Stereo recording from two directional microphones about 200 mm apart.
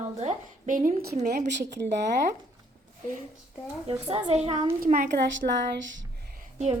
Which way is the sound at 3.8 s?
25° right (ahead or behind).